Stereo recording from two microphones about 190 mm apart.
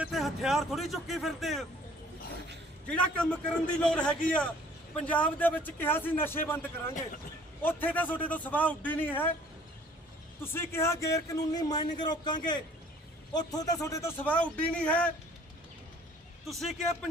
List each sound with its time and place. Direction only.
0.0 s speech: centre (ahead or behind)
2.8 s a man's voice: 5° left (ahead or behind)
10.4 s a man's voice: 10° left (ahead or behind)
16.5 s speech: centre (ahead or behind)